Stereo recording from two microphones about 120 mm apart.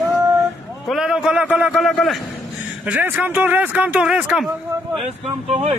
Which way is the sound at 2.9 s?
15° right (ahead or behind).